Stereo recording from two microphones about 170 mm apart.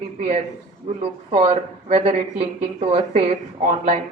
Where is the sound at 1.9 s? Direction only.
35° right (ahead or behind).